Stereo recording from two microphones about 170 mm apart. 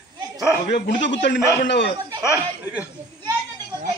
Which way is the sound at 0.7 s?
90° left.